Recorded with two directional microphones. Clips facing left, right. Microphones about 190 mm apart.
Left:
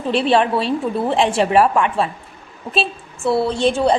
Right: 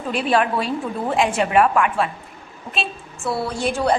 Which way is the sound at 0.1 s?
30° left (ahead or behind).